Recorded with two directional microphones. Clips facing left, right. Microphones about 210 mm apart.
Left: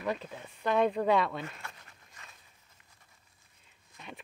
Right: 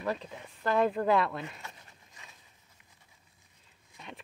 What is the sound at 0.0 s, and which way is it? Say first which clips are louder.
Speech: even; centre (ahead or behind).